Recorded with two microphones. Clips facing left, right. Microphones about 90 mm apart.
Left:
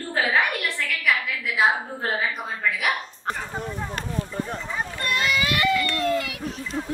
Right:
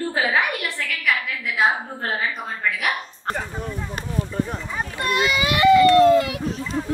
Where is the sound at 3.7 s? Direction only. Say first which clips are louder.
Even; 20° left (ahead or behind).